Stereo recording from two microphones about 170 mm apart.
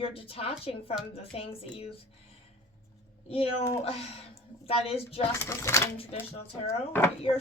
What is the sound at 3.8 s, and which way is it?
A woman's voice, 35° left (ahead or behind).